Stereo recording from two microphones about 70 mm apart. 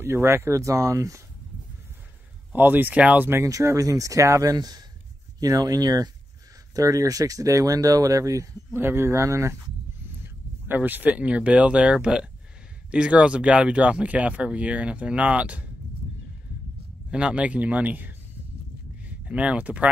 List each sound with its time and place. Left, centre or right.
0.0 s speech: right
2.5 s speech: right
3.7 s speech: right
8.7 s speech: right
10.2 s speech: right
17.1 s speech: centre